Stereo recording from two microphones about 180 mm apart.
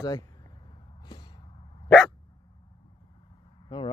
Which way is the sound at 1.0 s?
25° left (ahead or behind).